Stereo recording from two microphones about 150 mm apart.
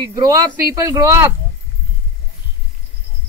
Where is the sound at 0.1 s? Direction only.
20° right (ahead or behind).